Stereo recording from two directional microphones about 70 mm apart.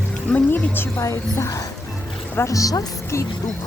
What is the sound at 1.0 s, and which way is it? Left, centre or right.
Speech, left.